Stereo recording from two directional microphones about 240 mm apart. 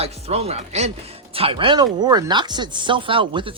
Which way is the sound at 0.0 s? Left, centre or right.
Right.